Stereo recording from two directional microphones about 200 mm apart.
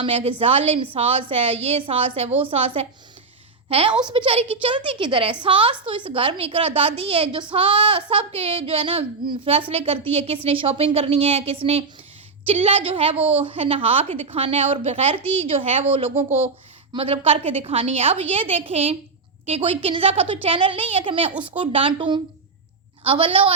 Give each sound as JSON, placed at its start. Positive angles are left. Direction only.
{"t": 0.0, "sound": "a woman's voice", "side_deg": -30}